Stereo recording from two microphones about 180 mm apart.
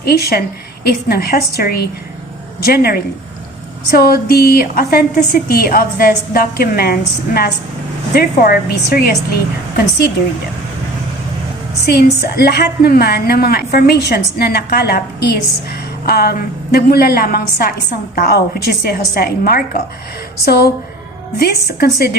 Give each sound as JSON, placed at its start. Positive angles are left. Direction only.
{"t": 0.0, "sound": "a woman's voice", "side_deg": 60}
{"t": 11.9, "sound": "a woman's voice", "side_deg": 60}